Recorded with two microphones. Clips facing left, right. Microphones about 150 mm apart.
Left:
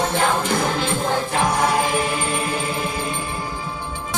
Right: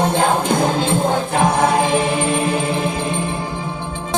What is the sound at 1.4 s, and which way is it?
Music, 55° right (ahead or behind).